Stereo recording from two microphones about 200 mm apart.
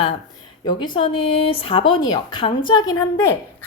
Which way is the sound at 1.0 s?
25° left (ahead or behind).